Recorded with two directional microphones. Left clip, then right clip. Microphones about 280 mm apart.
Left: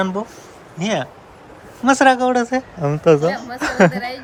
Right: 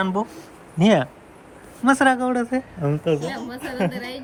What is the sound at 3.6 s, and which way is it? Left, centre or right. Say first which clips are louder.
Speech: left 12 dB; left.